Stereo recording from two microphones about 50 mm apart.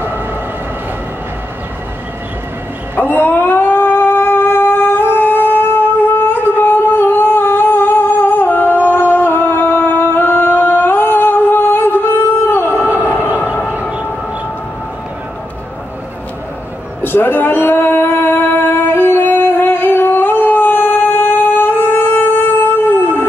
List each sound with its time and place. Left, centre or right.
0.0 s vehicle: right
3.0 s howl: left
17.0 s a sound: left